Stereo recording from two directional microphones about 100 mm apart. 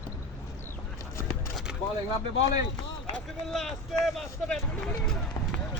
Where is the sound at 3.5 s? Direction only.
Centre (ahead or behind).